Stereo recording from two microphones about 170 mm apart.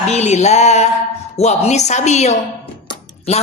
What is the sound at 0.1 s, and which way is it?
A woman's voice, 40° left (ahead or behind).